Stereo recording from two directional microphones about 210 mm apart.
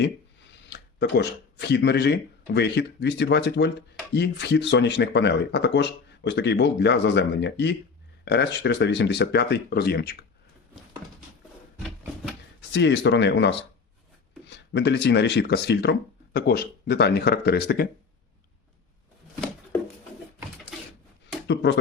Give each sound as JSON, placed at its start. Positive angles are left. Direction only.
{"t": 0.7, "sound": "speech", "side_deg": 55}
{"t": 12.7, "sound": "speech", "side_deg": 55}
{"t": 21.4, "sound": "a sound", "side_deg": 55}